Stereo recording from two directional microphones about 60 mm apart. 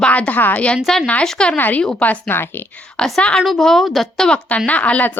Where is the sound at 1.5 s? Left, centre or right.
Left.